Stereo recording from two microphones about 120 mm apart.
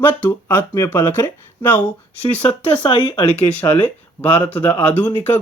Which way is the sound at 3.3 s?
15° left (ahead or behind).